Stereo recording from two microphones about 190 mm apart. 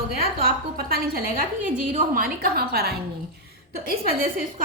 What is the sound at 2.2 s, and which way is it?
A woman's voice, 50° right (ahead or behind).